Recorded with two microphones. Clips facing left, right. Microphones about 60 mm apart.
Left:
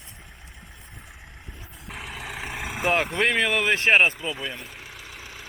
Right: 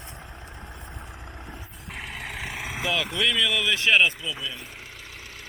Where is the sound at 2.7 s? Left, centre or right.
Left.